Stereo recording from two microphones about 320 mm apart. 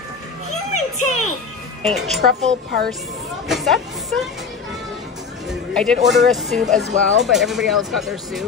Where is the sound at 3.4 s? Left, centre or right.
Centre.